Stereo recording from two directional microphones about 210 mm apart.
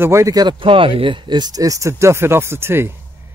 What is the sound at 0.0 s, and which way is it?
Speech, 15° right (ahead or behind).